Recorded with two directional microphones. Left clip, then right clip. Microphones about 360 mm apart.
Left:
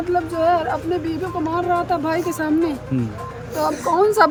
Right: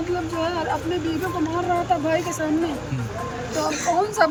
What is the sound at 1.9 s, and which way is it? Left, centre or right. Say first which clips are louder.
Speech: left 1 dB; centre.